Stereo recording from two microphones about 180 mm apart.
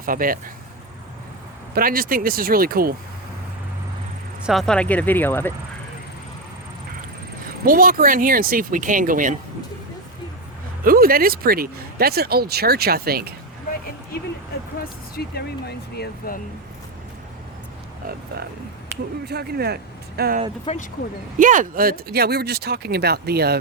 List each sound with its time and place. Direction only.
0.0 s speech: 50° right (ahead or behind)
1.7 s speech: 55° right (ahead or behind)
4.4 s speech: centre (ahead or behind)
7.6 s speech: 50° right (ahead or behind)
10.8 s speech: 55° right (ahead or behind)
14.8 s speech: 60° left (ahead or behind)
19.2 s speech: 60° right (ahead or behind)
20.7 s speech: 30° left (ahead or behind)
21.3 s speech: 45° right (ahead or behind); by 23.6 s 60° right (ahead or behind)